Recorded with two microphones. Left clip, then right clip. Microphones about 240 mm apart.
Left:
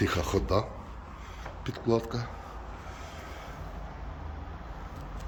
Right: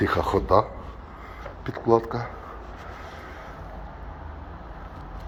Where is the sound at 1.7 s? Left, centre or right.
Centre.